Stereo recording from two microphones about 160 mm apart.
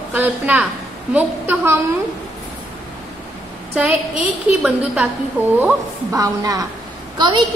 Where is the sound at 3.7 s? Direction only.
5° right (ahead or behind).